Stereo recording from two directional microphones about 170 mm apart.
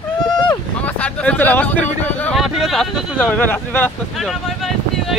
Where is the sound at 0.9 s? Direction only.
10° left (ahead or behind).